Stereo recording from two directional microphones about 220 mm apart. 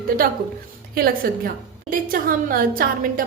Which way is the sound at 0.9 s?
40° right (ahead or behind).